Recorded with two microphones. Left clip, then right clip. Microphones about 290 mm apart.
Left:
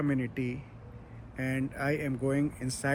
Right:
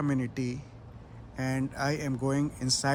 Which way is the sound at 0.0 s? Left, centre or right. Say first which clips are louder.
Even; centre.